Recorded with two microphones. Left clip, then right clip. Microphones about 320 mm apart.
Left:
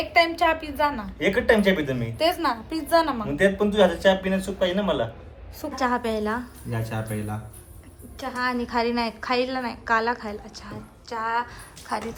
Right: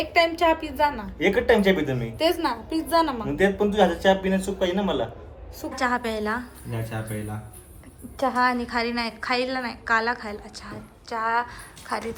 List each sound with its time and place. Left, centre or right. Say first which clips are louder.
0.1 s a woman's voice: even; centre
1.2 s speech: even; centre
2.1 s a woman's voice: left 1 dB; centre
3.3 s speech: left 1 dB; centre
5.7 s a woman's voice: even; centre